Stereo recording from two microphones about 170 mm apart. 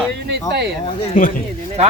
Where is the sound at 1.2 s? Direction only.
50° left (ahead or behind).